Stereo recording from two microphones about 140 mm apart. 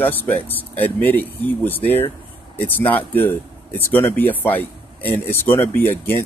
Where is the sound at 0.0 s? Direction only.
15° left (ahead or behind).